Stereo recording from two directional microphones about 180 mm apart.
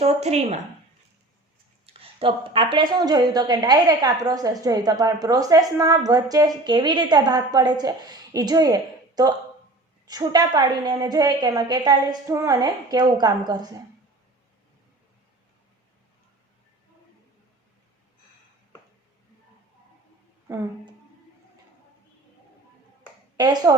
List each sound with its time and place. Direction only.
0.0 s speech: 35° right (ahead or behind)
1.9 s a woman's voice: 30° right (ahead or behind)
20.5 s speech: 20° right (ahead or behind)
23.4 s a woman's voice: 20° right (ahead or behind)